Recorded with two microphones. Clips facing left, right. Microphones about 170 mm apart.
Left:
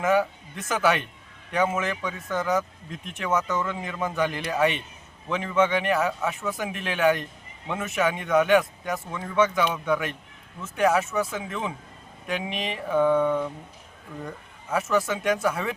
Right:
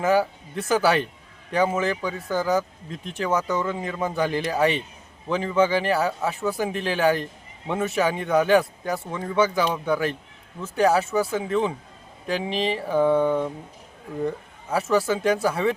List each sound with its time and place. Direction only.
0.0 s speech: 30° right (ahead or behind)